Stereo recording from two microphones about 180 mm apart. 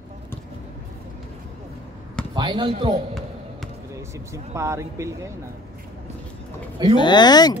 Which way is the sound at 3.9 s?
15° right (ahead or behind).